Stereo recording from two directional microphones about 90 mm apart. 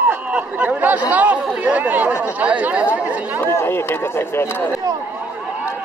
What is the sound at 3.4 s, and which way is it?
Speech, 30° left (ahead or behind).